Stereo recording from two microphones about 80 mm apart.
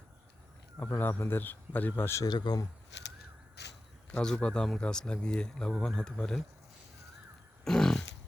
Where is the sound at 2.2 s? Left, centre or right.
Left.